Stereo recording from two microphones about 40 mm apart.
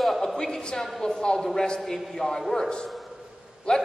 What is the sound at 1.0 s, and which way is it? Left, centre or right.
A man's voice, centre.